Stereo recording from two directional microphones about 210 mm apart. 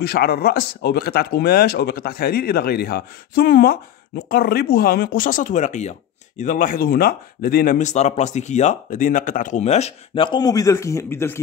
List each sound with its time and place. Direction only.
0.0 s speech: 50° left (ahead or behind); by 11.4 s 10° left (ahead or behind)